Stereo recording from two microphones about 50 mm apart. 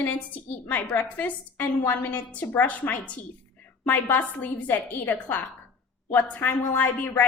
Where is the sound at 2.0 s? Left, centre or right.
Left.